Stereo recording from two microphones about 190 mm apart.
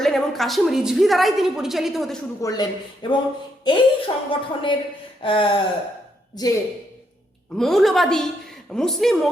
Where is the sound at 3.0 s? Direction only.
25° left (ahead or behind).